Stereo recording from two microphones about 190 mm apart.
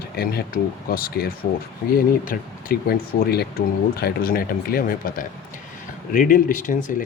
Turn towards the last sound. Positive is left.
turn(degrees=40)  # may be behind; listen again after turning